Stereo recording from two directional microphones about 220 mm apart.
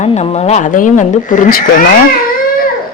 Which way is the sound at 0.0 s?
30° left (ahead or behind).